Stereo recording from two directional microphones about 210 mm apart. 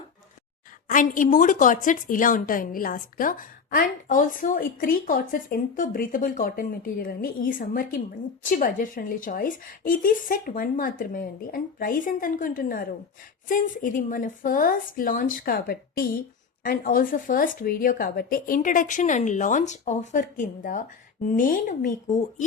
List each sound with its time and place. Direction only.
0.9 s a woman's voice: 40° left (ahead or behind)